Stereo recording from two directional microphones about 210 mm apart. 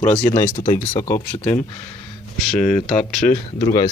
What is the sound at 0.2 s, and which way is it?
Speech, 15° left (ahead or behind).